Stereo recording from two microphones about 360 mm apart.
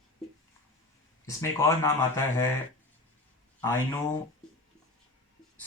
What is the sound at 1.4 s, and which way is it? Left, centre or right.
Speech, centre.